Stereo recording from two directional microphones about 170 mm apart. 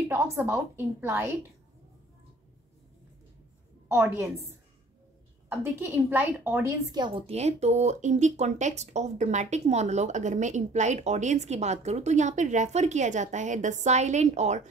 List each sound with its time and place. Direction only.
0.1 s a woman's voice: 15° right (ahead or behind)
3.9 s a woman's voice: 15° right (ahead or behind); by 14.6 s 40° right (ahead or behind)